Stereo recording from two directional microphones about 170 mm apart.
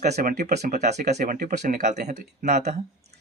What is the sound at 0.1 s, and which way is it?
Speech, 45° right (ahead or behind).